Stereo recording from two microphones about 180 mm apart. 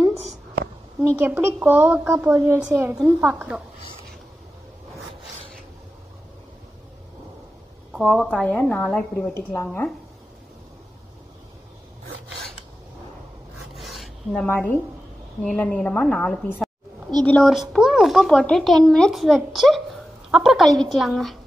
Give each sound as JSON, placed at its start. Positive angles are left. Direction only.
{"t": 1.1, "sound": "a woman's voice", "side_deg": -10}
{"t": 7.9, "sound": "speech", "side_deg": 0}
{"t": 13.7, "sound": "rub", "side_deg": 0}
{"t": 15.4, "sound": "a woman's voice", "side_deg": 5}